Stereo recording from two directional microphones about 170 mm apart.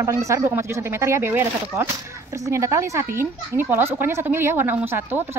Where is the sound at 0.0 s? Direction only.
20° right (ahead or behind).